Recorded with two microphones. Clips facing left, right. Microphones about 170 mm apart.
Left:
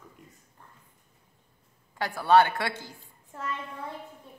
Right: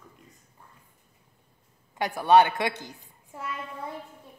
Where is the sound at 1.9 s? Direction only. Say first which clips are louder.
Right 2 dB; 20° right (ahead or behind).